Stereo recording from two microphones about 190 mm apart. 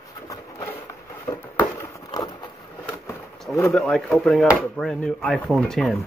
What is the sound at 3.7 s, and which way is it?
Speech, centre (ahead or behind).